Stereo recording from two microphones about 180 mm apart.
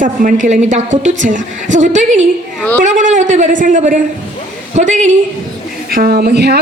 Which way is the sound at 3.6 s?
45° right (ahead or behind).